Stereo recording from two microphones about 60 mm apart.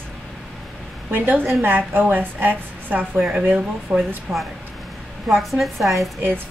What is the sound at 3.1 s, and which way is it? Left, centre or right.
A woman's voice, centre.